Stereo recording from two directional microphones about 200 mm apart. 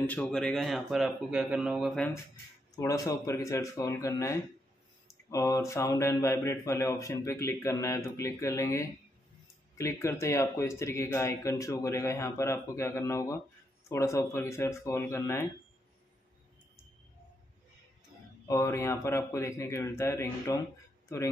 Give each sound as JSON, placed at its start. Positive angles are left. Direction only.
{"t": 0.0, "sound": "speech", "side_deg": 5}
{"t": 2.7, "sound": "speech", "side_deg": 15}
{"t": 18.5, "sound": "speech", "side_deg": 15}